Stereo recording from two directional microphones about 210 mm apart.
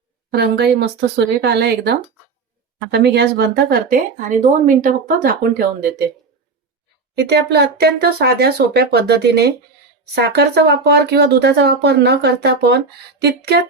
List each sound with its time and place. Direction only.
0.3 s speech: 50° right (ahead or behind)
7.2 s speech: 50° right (ahead or behind)